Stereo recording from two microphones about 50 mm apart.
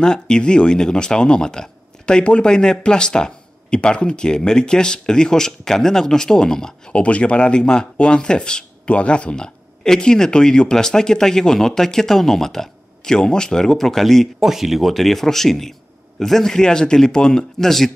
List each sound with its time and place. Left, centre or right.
0.0 s speech: centre
7.0 s speech: left; by 14.3 s centre
14.4 s speech: centre